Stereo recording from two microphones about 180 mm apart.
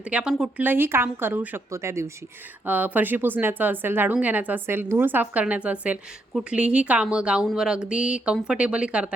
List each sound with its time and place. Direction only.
0.1 s speech: 5° right (ahead or behind)